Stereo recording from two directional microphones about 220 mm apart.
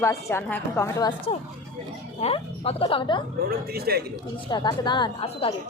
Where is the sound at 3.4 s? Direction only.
45° right (ahead or behind).